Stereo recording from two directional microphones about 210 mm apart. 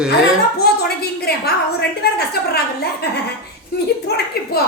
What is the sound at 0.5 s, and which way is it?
A woman's voice, 50° left (ahead or behind).